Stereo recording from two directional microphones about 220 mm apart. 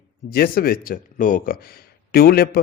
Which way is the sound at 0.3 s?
40° left (ahead or behind).